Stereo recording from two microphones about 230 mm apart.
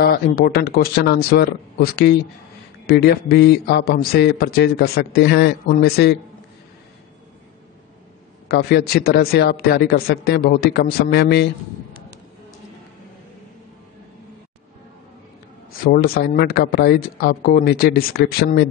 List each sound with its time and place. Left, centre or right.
0.0 s a man's voice: left
8.5 s a man's voice: left
15.8 s speech: left